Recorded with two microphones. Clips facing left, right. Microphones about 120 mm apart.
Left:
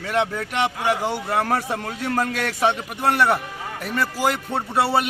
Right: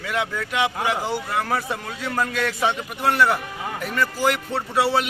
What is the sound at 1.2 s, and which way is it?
A man's voice, 35° left (ahead or behind).